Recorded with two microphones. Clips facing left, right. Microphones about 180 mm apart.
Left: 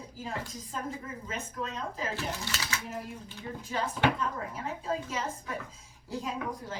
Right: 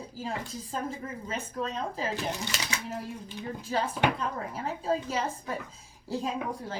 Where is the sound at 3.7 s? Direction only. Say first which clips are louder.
Right 1 dB; 35° right (ahead or behind).